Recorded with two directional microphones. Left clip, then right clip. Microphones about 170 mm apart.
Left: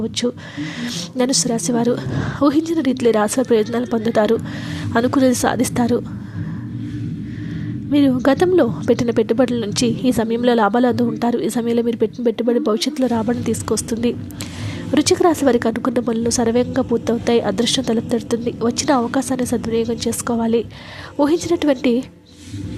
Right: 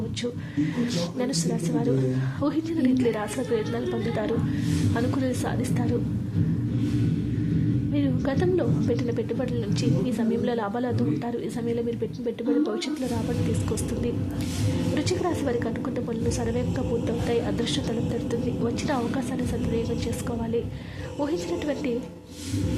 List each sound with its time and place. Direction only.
0.2 s a woman's voice: 40° left (ahead or behind)
7.9 s a woman's voice: 40° left (ahead or behind)
14.9 s a woman's voice: 40° left (ahead or behind)